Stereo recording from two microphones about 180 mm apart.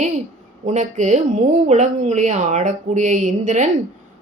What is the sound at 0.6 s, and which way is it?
A woman's voice, 40° right (ahead or behind).